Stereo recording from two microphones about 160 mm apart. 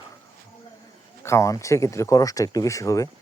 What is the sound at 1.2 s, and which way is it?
Speech, 20° left (ahead or behind).